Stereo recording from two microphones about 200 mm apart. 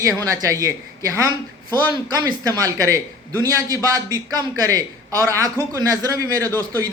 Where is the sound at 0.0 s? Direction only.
15° right (ahead or behind).